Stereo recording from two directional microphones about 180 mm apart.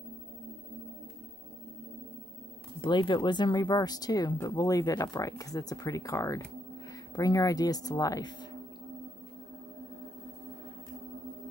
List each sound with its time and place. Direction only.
2.8 s speech: 25° left (ahead or behind)